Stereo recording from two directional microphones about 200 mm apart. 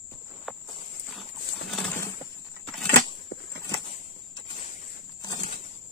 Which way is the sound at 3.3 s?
75° left (ahead or behind).